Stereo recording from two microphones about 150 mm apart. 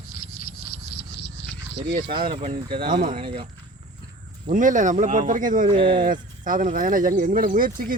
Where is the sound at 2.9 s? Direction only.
65° right (ahead or behind).